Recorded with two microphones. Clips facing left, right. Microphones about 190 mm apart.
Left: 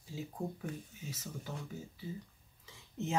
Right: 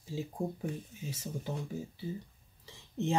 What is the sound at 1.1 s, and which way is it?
Speech, 30° right (ahead or behind).